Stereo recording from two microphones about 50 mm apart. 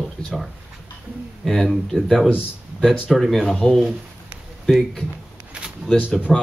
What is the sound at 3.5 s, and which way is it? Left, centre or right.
Speech, centre.